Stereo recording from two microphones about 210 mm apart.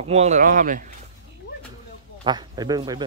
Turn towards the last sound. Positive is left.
turn(degrees=-20)  # may be behind; listen again after turning